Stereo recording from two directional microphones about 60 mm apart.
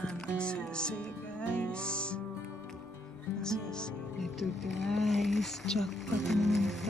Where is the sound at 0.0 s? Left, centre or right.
Centre.